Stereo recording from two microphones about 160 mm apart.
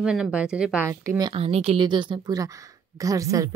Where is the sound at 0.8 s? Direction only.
20° right (ahead or behind).